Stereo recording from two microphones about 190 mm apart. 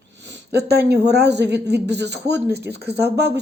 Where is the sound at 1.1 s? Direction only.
60° right (ahead or behind).